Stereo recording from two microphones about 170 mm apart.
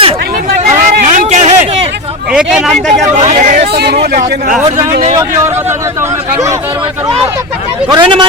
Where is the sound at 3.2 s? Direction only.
55° right (ahead or behind).